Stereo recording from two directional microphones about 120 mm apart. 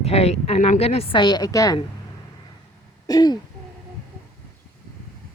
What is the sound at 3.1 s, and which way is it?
Throat clearing, 35° left (ahead or behind).